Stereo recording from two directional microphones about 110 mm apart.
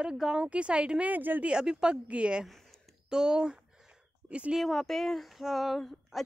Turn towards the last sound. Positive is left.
turn(degrees=0)  # may be behind; listen again after turning